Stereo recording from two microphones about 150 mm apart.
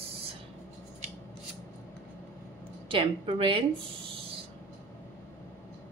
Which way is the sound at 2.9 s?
35° right (ahead or behind).